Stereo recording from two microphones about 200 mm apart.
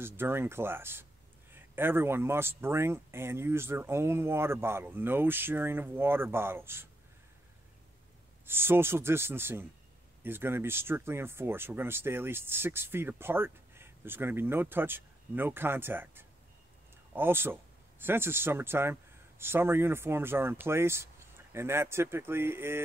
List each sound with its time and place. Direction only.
0.0 s speech: 10° right (ahead or behind)
8.5 s speech: 10° right (ahead or behind)